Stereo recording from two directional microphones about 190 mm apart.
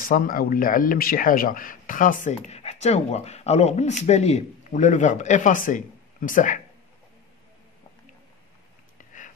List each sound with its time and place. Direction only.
0.0 s speech: 50° left (ahead or behind)